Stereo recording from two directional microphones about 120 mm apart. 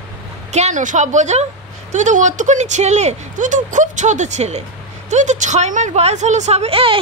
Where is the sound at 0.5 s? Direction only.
75° right (ahead or behind).